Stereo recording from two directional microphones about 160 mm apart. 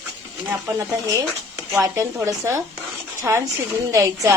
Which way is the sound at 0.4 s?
20° right (ahead or behind).